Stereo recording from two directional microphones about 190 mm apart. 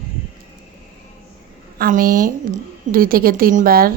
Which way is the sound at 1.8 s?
45° right (ahead or behind).